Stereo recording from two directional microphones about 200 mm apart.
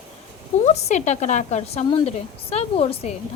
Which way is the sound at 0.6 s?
35° left (ahead or behind).